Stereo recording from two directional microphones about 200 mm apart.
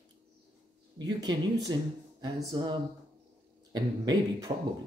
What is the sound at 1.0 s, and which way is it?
Speech, 20° right (ahead or behind).